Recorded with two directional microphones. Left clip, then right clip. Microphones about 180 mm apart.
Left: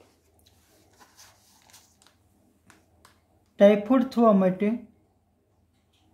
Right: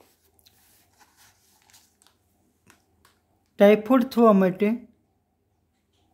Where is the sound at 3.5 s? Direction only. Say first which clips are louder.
Right 1 dB; 50° right (ahead or behind).